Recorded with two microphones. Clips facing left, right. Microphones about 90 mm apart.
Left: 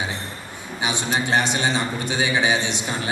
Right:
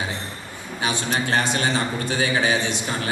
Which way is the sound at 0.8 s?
20° left (ahead or behind).